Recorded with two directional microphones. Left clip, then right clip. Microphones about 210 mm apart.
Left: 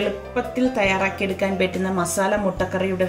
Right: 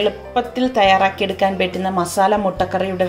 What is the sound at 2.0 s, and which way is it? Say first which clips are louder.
A woman's voice: right 6 dB; 30° right (ahead or behind).